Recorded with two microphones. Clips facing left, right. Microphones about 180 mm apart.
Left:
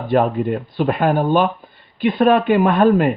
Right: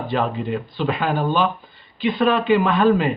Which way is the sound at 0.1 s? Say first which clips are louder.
Left 7 dB; 50° left (ahead or behind).